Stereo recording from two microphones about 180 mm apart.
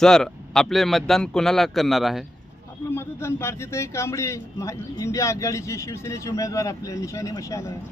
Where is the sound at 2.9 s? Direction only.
15° left (ahead or behind).